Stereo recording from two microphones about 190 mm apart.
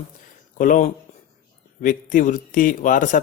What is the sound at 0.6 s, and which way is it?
Speech, 45° left (ahead or behind).